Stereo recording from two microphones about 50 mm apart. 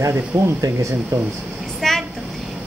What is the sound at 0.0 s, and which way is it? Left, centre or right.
Speech, right.